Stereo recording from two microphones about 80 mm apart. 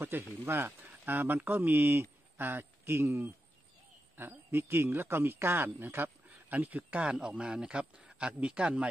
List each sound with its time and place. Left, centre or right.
0.0 s a man's voice: right; by 8.8 s centre